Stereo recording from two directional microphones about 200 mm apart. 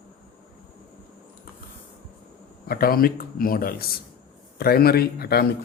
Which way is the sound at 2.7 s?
50° left (ahead or behind).